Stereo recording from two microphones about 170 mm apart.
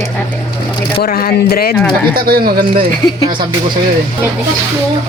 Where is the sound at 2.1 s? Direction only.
60° right (ahead or behind).